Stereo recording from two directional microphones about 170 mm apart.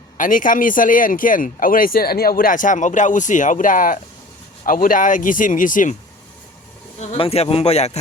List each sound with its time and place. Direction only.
0.2 s speech: 50° left (ahead or behind)
7.0 s speech: 40° left (ahead or behind)